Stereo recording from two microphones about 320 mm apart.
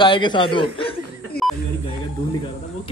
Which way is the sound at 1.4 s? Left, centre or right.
Left.